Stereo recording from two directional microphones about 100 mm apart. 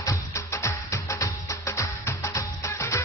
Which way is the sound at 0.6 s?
30° left (ahead or behind).